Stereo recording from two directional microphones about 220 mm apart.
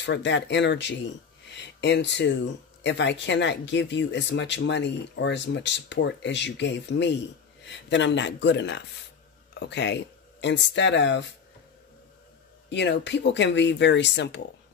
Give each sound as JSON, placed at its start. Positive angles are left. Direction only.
{"t": 0.0, "sound": "speech", "side_deg": 55}
{"t": 12.6, "sound": "speech", "side_deg": 55}